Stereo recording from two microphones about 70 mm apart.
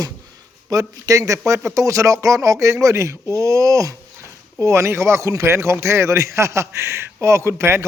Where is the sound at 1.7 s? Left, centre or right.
Right.